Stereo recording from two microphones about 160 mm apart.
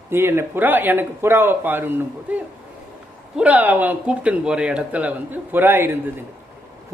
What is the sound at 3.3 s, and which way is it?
Speech, 10° right (ahead or behind).